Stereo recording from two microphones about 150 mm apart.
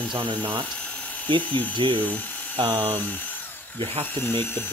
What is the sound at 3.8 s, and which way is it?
Speech, 35° right (ahead or behind).